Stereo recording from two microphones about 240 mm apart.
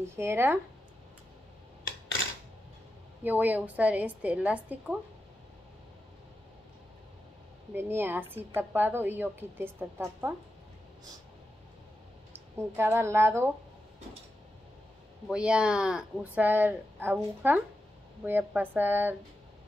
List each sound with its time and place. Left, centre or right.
0.0 s a woman's voice: centre
3.3 s a woman's voice: centre
7.7 s a woman's voice: centre
12.7 s a woman's voice: centre
15.2 s a woman's voice: centre